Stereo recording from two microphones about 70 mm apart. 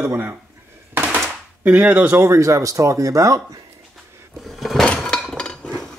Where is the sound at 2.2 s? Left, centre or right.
Right.